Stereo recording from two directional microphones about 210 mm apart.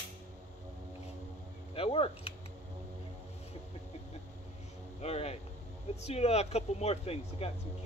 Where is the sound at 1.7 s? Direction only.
25° left (ahead or behind).